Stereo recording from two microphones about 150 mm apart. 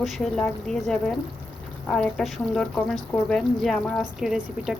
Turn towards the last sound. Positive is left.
turn(degrees=-5)  # may be behind; listen again after turning